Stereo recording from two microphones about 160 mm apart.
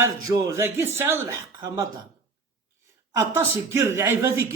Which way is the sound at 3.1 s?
15° right (ahead or behind).